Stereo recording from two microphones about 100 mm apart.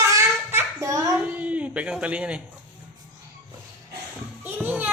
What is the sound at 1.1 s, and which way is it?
A woman's voice, 15° right (ahead or behind).